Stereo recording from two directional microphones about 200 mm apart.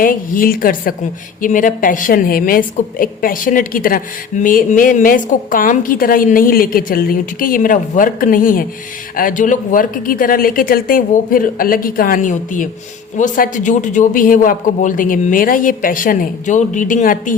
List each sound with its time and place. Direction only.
0.0 s a woman's voice: 45° left (ahead or behind)